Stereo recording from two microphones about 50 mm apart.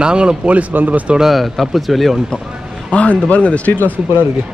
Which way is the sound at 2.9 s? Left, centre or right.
Left.